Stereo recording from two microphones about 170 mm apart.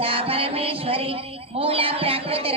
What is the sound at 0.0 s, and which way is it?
Music, 35° right (ahead or behind).